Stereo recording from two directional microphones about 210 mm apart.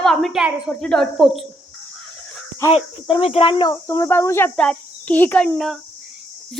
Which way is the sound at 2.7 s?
25° left (ahead or behind).